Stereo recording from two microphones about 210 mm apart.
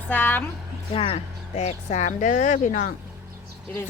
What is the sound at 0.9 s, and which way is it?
Speech, 25° left (ahead or behind).